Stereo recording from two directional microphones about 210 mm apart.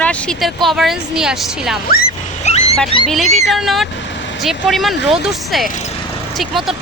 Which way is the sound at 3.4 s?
Centre (ahead or behind).